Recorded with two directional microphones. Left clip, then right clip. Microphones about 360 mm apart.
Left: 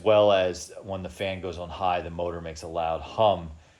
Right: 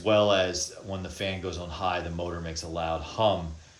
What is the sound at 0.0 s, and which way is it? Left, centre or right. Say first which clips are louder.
Speech: left 3 dB; left.